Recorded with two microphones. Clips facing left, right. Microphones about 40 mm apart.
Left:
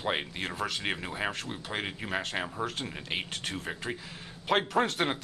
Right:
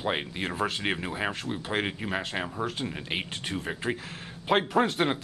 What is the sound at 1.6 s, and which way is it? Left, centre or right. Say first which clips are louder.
Speech: right 6 dB; right.